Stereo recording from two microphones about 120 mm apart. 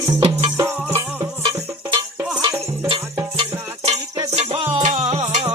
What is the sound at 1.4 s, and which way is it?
Music, 45° right (ahead or behind).